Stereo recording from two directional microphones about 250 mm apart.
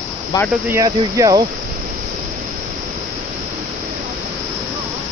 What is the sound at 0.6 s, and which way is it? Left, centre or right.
Speech, centre.